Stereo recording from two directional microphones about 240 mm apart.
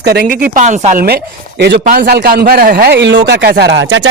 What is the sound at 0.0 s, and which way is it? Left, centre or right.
A man's voice, right.